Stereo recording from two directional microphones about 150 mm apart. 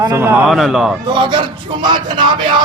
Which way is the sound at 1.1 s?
30° right (ahead or behind).